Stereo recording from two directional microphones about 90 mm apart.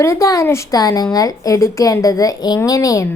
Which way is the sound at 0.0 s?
35° left (ahead or behind).